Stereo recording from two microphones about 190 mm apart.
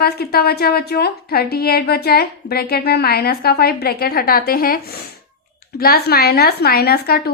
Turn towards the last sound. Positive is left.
turn(degrees=55)  # may be behind; listen again after turning